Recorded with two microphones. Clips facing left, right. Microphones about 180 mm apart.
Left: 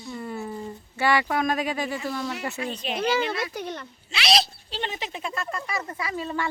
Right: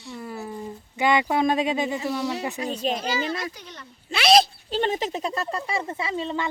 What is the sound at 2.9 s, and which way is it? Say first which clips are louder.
Speech: left 2 dB; 60° left (ahead or behind).